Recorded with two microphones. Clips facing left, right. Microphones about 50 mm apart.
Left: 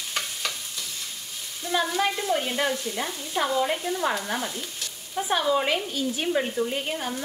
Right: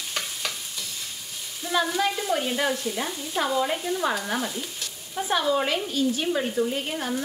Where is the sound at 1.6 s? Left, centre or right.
Centre.